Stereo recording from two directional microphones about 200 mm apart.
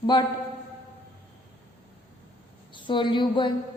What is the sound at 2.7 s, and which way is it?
Speech, 25° left (ahead or behind).